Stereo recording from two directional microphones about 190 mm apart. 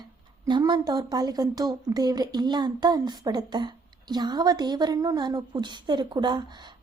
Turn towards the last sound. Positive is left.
turn(degrees=-25)  # may be behind; listen again after turning